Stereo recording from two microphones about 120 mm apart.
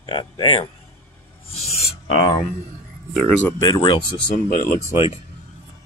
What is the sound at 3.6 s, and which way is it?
Speech, 35° left (ahead or behind).